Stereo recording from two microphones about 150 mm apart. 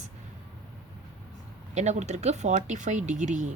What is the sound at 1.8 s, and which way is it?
A woman's voice, 50° right (ahead or behind).